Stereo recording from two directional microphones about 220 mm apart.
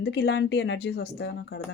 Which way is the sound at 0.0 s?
50° left (ahead or behind).